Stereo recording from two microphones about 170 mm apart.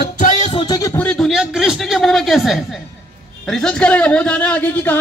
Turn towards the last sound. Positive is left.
turn(degrees=10)  # may be behind; listen again after turning